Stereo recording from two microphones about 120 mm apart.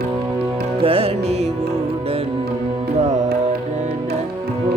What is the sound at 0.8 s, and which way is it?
Music, 50° right (ahead or behind).